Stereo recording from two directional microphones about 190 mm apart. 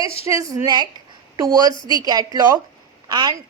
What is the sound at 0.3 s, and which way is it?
A woman's voice, 15° right (ahead or behind).